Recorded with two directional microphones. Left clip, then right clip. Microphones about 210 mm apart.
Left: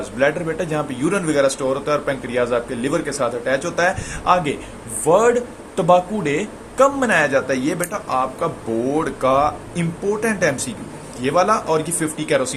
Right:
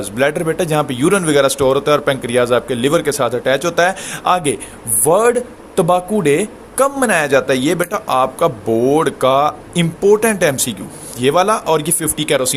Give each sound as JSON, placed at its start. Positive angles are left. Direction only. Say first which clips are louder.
{"t": 0.0, "sound": "speech", "louder": "right 3 dB", "side_deg": -55}